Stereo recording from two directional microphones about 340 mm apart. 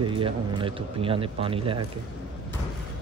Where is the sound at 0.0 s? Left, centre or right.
Centre.